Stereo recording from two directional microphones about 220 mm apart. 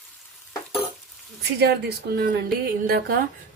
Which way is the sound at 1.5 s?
50° right (ahead or behind).